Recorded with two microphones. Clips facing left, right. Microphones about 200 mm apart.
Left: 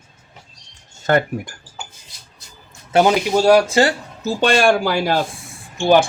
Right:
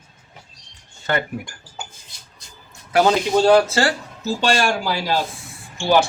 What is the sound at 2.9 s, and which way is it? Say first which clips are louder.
Speech: left 1 dB; 15° left (ahead or behind).